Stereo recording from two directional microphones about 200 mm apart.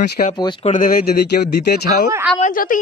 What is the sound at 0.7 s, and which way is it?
A woman's voice, 45° left (ahead or behind).